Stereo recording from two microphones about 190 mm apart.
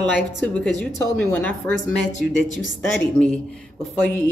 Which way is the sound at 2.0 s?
40° left (ahead or behind).